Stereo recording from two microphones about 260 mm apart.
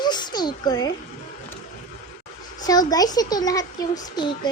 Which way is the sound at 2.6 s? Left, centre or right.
Centre.